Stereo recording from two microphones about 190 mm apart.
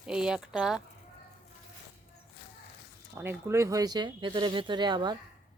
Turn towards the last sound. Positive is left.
turn(degrees=-25)  # may be behind; listen again after turning